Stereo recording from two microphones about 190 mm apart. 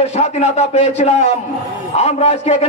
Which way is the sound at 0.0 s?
35° left (ahead or behind).